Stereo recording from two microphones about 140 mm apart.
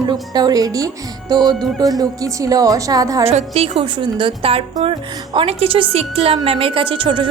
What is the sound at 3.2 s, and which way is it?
A woman's voice, 45° right (ahead or behind).